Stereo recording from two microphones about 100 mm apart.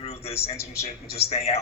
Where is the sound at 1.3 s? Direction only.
90° left.